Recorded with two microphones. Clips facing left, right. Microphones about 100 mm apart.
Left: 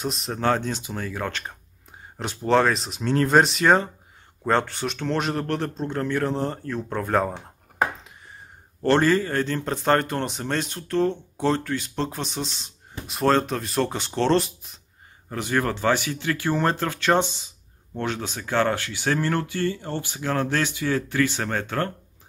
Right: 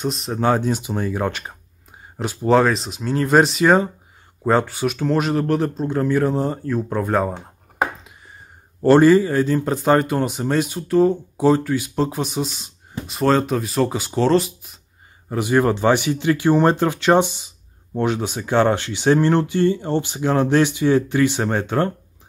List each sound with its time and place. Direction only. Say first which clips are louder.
0.0 s speech: right 5 dB; centre (ahead or behind)
0.4 s speech: right 5 dB; 10° right (ahead or behind)
8.8 s speech: right 7 dB; 10° right (ahead or behind)
15.2 s speech: right 7 dB; 15° right (ahead or behind)